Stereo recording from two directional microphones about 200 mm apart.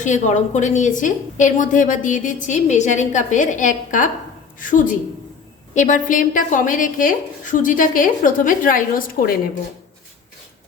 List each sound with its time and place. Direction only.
0.0 s a woman's voice: 35° left (ahead or behind)